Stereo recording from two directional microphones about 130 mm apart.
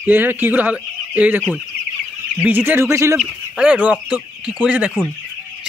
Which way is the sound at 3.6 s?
10° right (ahead or behind).